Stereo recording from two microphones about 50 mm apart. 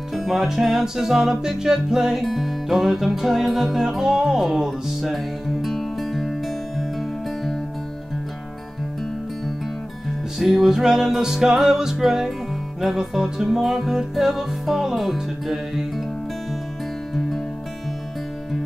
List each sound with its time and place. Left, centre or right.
0.1 s music: centre
10.4 s music: centre